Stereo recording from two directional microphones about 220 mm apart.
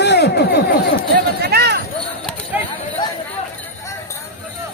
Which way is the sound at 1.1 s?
45° right (ahead or behind).